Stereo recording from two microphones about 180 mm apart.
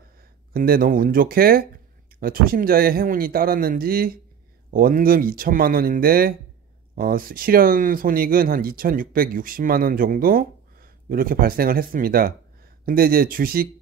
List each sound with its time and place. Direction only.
0.5 s speech: 55° right (ahead or behind)